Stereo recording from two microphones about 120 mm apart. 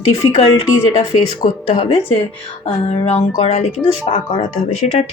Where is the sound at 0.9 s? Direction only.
55° left (ahead or behind).